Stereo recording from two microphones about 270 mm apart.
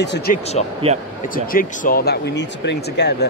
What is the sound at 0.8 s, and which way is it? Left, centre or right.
Speech, right.